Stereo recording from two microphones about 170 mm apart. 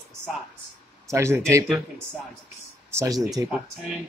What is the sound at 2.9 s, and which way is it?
Speech, 20° right (ahead or behind).